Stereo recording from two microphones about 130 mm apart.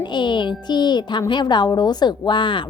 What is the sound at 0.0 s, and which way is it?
A woman's voice, 35° left (ahead or behind).